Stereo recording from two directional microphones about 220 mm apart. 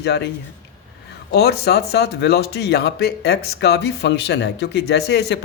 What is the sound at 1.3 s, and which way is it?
A man's voice, 45° left (ahead or behind).